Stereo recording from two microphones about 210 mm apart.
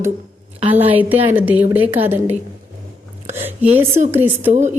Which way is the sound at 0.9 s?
10° right (ahead or behind).